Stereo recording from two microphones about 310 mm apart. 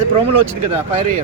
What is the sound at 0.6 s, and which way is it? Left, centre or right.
Speech, right.